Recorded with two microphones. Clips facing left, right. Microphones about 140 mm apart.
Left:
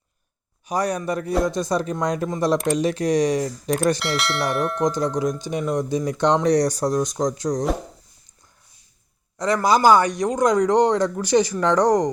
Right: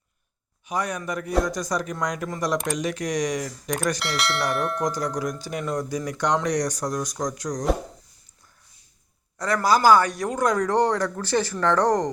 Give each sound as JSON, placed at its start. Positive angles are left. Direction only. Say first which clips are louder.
{"t": 0.7, "sound": "speech", "louder": "left 5 dB", "side_deg": 35}
{"t": 4.0, "sound": "bell", "louder": "left 2 dB", "side_deg": 0}
{"t": 4.8, "sound": "speech", "louder": "left 5 dB", "side_deg": 25}
{"t": 9.6, "sound": "speech", "louder": "left 1 dB", "side_deg": 20}